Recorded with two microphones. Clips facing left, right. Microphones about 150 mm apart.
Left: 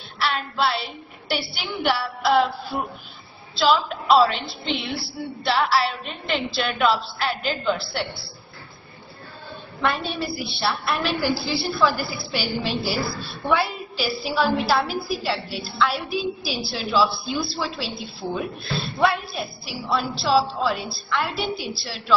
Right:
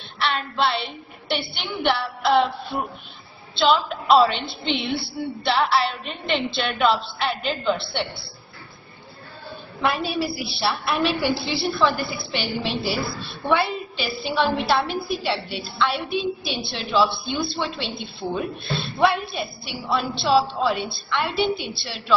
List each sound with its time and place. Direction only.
0.2 s a woman's voice: centre (ahead or behind)
9.8 s a woman's voice: centre (ahead or behind)